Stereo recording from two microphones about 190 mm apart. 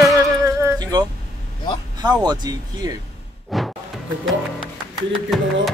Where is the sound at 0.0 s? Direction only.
15° right (ahead or behind).